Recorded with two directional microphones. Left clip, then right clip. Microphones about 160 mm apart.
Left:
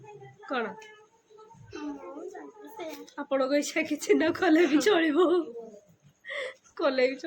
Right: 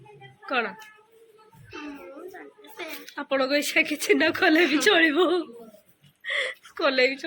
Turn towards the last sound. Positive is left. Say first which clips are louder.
# right 4 dB
turn(degrees=0)  # may be behind; listen again after turning